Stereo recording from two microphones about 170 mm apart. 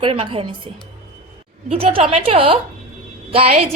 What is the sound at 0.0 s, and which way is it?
A woman's voice, 30° right (ahead or behind).